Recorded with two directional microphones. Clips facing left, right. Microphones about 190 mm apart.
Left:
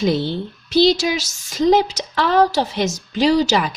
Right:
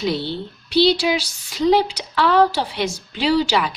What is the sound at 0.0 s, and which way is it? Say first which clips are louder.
Speech: left 4 dB; 45° left (ahead or behind).